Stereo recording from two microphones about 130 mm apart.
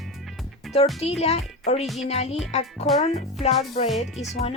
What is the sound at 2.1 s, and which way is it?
Speech, 55° left (ahead or behind).